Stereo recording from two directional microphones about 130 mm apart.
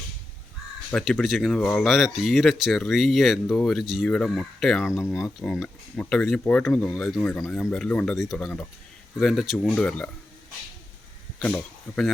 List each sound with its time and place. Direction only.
1.0 s speech: centre (ahead or behind)
7.2 s speech: 15° left (ahead or behind)
7.4 s speech: 5° left (ahead or behind)